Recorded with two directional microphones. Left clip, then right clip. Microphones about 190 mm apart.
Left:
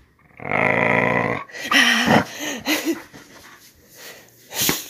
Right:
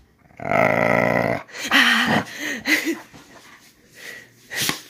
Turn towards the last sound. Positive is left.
turn(degrees=-10)  # may be behind; listen again after turning